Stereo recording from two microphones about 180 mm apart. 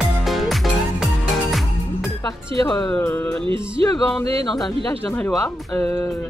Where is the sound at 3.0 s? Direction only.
15° left (ahead or behind).